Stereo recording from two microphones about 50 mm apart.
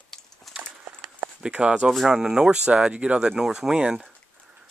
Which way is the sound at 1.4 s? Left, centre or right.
Centre.